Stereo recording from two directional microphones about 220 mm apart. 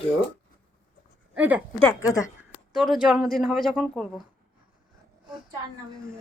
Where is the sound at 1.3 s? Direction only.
5° right (ahead or behind).